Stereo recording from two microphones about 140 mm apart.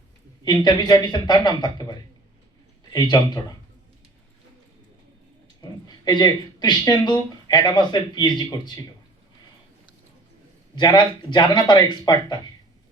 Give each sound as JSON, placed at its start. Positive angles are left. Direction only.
{"t": 0.4, "sound": "speech", "side_deg": 30}
{"t": 6.1, "sound": "speech", "side_deg": 30}
{"t": 10.8, "sound": "speech", "side_deg": 30}